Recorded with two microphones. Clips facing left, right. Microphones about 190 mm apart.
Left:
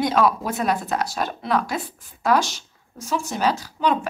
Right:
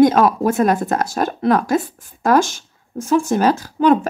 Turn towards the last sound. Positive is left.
turn(degrees=-50)  # may be behind; listen again after turning